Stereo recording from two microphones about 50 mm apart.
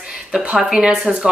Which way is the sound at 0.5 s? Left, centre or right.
Right.